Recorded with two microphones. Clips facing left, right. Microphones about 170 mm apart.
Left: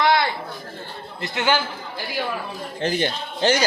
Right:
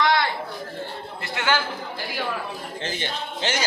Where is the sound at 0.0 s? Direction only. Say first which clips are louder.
Left 2 dB; 10° left (ahead or behind).